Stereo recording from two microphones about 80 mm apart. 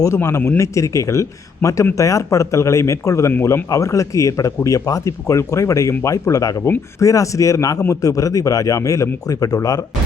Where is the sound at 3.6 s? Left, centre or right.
Left.